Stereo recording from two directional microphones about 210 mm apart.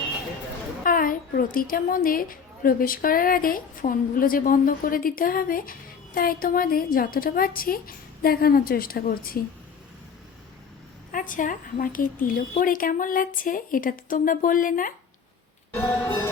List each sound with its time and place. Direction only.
0.9 s a woman's voice: 40° left (ahead or behind)
11.1 s a woman's voice: 40° left (ahead or behind)
15.8 s music: 10° left (ahead or behind)